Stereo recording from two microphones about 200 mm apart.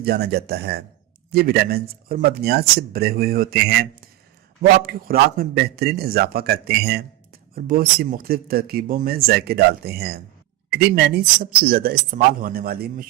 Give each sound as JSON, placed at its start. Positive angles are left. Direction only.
{"t": 0.0, "sound": "speech", "side_deg": -50}